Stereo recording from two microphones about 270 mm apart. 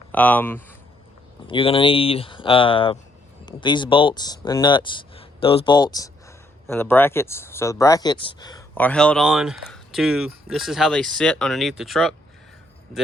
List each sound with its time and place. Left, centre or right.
0.1 s speech: centre
1.5 s speech: centre